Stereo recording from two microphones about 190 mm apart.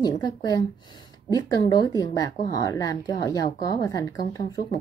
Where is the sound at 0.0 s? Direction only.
20° left (ahead or behind).